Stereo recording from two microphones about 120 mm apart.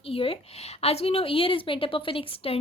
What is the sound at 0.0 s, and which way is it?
A woman's voice, 55° left (ahead or behind).